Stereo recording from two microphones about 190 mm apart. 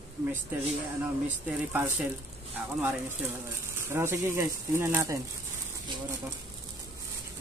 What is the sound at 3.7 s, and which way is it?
Speech, 15° right (ahead or behind).